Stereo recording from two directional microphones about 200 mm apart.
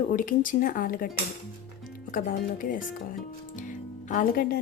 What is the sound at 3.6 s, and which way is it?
Music, 40° left (ahead or behind).